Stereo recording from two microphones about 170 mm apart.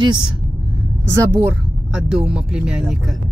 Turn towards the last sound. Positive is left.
turn(degrees=0)  # may be behind; listen again after turning